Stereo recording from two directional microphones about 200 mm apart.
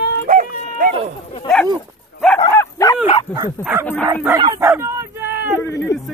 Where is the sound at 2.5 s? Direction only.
15° left (ahead or behind).